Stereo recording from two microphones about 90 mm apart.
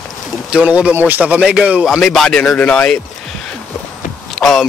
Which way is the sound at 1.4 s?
10° right (ahead or behind).